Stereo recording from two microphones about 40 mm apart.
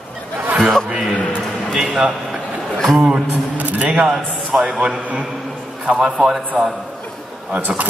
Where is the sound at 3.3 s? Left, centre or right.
Right.